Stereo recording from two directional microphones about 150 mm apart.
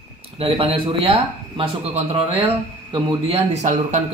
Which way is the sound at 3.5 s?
55° right (ahead or behind).